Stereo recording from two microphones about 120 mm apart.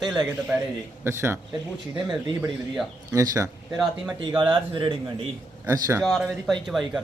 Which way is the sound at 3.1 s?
25° right (ahead or behind).